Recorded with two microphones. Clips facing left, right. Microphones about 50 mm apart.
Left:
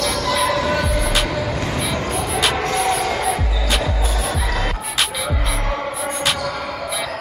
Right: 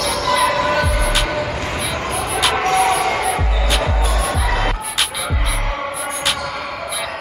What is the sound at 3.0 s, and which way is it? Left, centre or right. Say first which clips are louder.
Music: right 3 dB; right.